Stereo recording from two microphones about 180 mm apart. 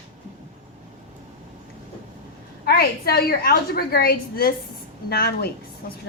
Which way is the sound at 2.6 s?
60° left (ahead or behind).